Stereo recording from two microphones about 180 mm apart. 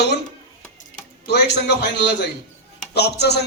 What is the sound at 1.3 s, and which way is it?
Speech, 70° left (ahead or behind).